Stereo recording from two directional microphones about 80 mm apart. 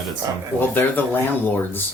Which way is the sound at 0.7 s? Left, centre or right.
Left.